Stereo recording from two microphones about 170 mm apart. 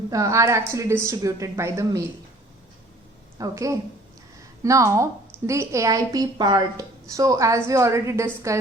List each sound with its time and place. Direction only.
0.1 s a woman's voice: 20° right (ahead or behind)
3.3 s a woman's voice: 20° right (ahead or behind)